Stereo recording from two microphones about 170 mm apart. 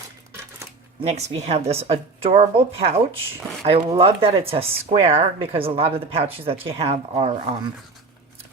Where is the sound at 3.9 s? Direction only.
35° right (ahead or behind).